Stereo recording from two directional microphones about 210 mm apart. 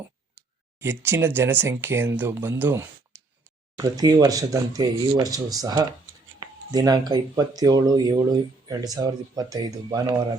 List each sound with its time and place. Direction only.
0.8 s speech: 10° right (ahead or behind)